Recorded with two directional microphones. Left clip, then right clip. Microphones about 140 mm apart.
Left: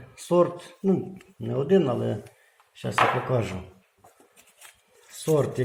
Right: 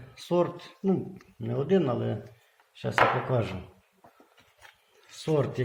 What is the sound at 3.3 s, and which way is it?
Speech, 25° left (ahead or behind).